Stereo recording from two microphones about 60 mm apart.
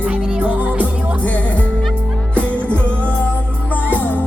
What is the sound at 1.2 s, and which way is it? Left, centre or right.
Music, left.